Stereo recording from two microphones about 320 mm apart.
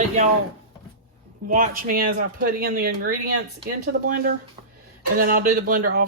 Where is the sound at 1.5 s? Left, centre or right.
Right.